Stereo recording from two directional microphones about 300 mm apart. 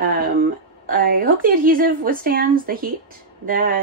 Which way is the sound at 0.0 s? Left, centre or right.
Right.